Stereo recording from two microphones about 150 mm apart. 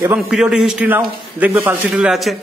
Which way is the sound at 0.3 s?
5° right (ahead or behind).